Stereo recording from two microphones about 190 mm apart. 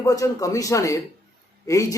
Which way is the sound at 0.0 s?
15° left (ahead or behind).